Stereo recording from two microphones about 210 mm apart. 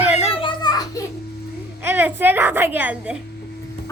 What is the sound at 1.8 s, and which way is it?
A woman's voice, 10° right (ahead or behind).